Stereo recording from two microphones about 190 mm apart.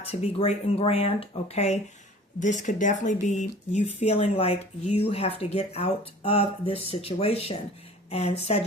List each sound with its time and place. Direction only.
0.0 s speech: 35° left (ahead or behind)